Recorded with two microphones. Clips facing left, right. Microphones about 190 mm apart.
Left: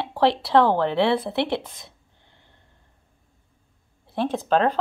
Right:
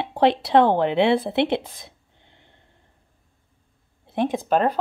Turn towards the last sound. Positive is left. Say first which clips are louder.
# even
turn(degrees=-10)  # may be behind; listen again after turning